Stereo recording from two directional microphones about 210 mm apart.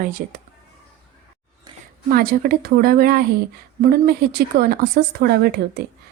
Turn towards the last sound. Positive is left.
turn(degrees=-50)  # may be behind; listen again after turning